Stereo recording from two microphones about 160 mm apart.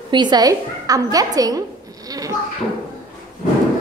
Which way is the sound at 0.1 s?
25° right (ahead or behind).